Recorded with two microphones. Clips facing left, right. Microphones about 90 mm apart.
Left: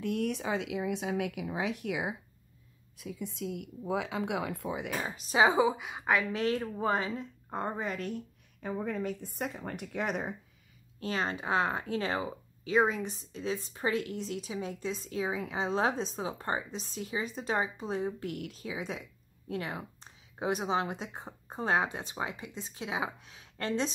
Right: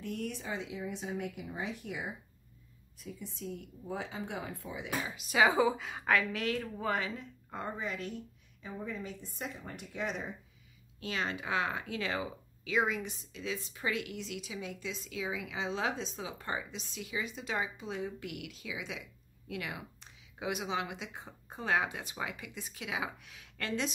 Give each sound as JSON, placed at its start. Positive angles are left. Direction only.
{"t": 0.0, "sound": "speech", "side_deg": 65}
{"t": 5.0, "sound": "speech", "side_deg": 35}
{"t": 6.4, "sound": "speech", "side_deg": 30}
{"t": 8.6, "sound": "speech", "side_deg": 60}
{"t": 11.0, "sound": "speech", "side_deg": 35}